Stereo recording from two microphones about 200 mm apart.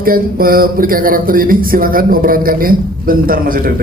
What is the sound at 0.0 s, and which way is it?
Speech, 45° right (ahead or behind).